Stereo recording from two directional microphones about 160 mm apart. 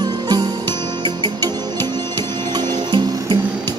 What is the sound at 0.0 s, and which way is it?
Music, 25° right (ahead or behind).